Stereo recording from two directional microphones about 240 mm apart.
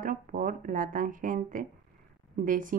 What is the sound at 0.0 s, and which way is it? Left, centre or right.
Speech, right.